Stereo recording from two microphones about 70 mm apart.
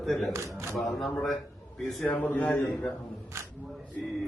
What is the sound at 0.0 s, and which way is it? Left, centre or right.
Speech, centre.